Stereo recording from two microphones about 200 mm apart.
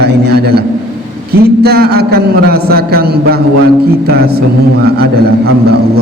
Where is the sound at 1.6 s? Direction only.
55° right (ahead or behind).